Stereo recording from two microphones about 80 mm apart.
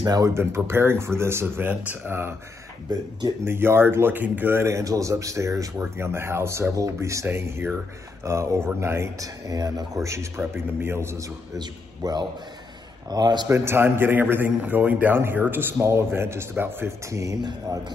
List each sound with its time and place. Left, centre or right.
0.0 s speech: right
0.3 s speech: right
2.9 s speech: right
3.4 s speech: right
9.2 s speech: right
9.9 s speech: right
11.6 s a man's voice: right
13.5 s a man's voice: right
17.1 s speech: right